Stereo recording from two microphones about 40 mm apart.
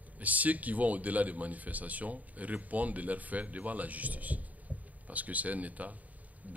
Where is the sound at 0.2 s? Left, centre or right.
Right.